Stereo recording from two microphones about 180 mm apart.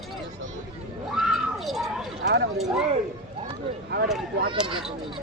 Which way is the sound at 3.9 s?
65° right (ahead or behind).